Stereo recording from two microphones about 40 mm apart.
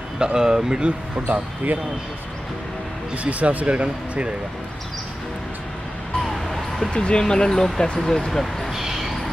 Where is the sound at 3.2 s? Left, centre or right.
Right.